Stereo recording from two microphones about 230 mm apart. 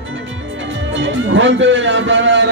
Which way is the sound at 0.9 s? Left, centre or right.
Right.